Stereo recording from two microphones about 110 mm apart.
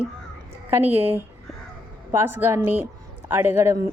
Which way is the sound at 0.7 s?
20° right (ahead or behind).